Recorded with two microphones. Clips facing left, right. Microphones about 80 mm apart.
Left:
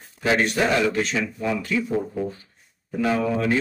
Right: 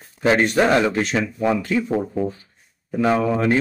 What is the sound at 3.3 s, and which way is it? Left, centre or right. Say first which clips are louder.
Speech: right 3 dB; right.